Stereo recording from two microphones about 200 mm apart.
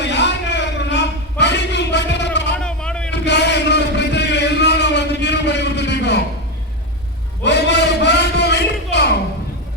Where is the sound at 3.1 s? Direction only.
60° left (ahead or behind).